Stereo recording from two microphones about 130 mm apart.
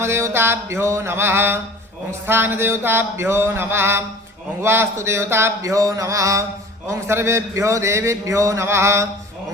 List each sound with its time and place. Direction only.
0.0 s a man's voice: 20° right (ahead or behind)
2.2 s a sound: 15° right (ahead or behind)
4.6 s a man's voice: 20° right (ahead or behind)